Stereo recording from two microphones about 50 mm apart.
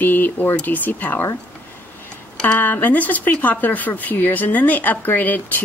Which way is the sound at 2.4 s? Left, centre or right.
Left.